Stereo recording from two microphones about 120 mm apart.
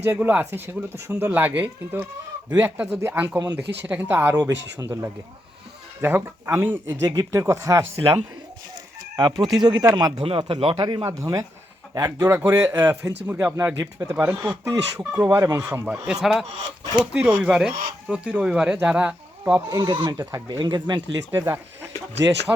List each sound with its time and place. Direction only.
0.0 s speech: 15° right (ahead or behind)
4.4 s speech: 35° right (ahead or behind)
4.9 s speech: 15° right (ahead or behind)
9.1 s speech: 35° right (ahead or behind)
11.0 s speech: 25° right (ahead or behind)
12.8 s speech: 10° right (ahead or behind)
14.0 s speech: 30° right (ahead or behind)
16.2 s speech: centre (ahead or behind)
19.7 s speech: 40° right (ahead or behind)
21.3 s speech: 20° right (ahead or behind)